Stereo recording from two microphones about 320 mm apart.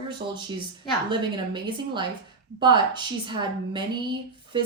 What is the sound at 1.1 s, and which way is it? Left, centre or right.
A woman's voice, centre.